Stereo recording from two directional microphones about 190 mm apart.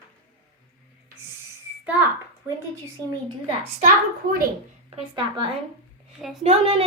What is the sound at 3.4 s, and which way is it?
Speech, 35° right (ahead or behind).